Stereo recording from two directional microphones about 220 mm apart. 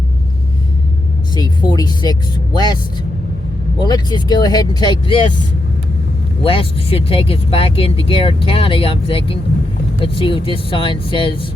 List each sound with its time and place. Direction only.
1.4 s speech: 20° left (ahead or behind)
3.8 s speech: 20° left (ahead or behind)
6.4 s speech: 25° left (ahead or behind)